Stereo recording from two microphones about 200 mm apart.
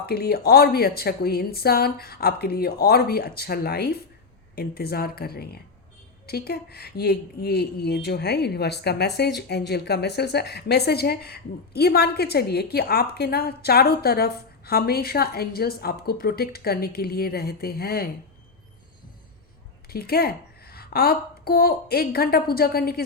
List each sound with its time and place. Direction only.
0.0 s a woman's voice: 50° left (ahead or behind)
19.9 s a woman's voice: 50° left (ahead or behind)